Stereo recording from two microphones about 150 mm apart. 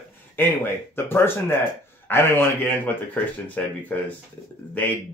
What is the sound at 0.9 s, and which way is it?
Speech, 15° left (ahead or behind).